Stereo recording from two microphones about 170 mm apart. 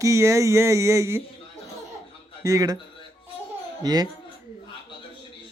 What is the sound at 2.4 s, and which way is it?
Speech, 20° right (ahead or behind).